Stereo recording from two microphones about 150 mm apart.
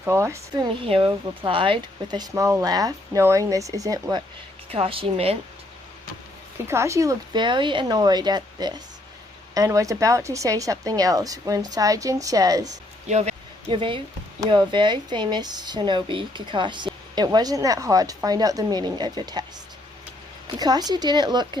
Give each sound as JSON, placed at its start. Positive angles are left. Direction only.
{"t": 0.0, "sound": "speech", "side_deg": -15}
{"t": 4.7, "sound": "a woman's voice", "side_deg": -40}
{"t": 6.7, "sound": "speech", "side_deg": -20}
{"t": 13.1, "sound": "speech", "side_deg": -50}
{"t": 13.7, "sound": "a woman's voice", "side_deg": -35}
{"t": 20.6, "sound": "speech", "side_deg": -25}